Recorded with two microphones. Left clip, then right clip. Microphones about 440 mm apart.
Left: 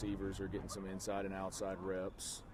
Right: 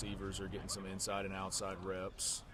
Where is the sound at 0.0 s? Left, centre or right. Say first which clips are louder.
Left 2 dB; right.